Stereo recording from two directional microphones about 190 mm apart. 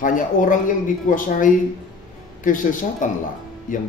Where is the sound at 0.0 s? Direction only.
45° left (ahead or behind).